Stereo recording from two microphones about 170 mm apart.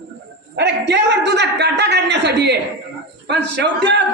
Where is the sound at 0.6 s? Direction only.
90° right.